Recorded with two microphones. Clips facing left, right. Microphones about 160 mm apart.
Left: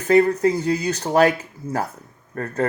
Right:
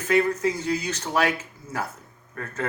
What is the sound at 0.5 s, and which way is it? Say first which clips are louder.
Speech: left 6 dB; 35° left (ahead or behind).